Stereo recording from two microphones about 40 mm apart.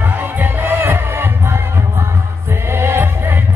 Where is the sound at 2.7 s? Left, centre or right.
Right.